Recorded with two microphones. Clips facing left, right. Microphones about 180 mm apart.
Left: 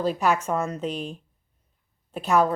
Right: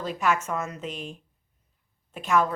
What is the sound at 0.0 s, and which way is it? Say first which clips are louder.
A woman's voice: left 3 dB; 35° left (ahead or behind).